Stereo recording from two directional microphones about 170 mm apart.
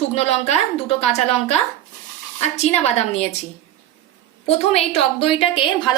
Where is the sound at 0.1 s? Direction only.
40° left (ahead or behind).